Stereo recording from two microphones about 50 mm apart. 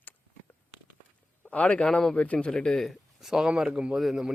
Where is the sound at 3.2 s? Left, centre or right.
Centre.